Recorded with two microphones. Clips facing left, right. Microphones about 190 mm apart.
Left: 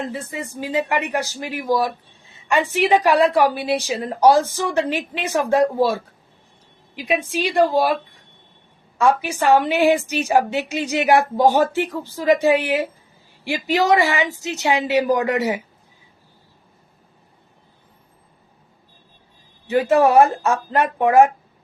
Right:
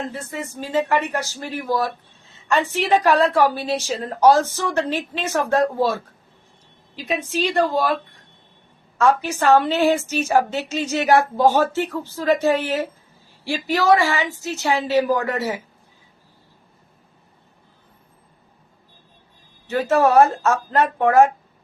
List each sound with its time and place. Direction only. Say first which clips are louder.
0.1 s a woman's voice: left 1 dB; 15° left (ahead or behind)
9.0 s a woman's voice: even; 10° left (ahead or behind)
19.6 s a woman's voice: left 2 dB; 15° left (ahead or behind)